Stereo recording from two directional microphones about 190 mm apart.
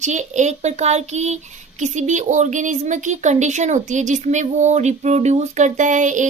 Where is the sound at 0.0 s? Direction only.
40° right (ahead or behind).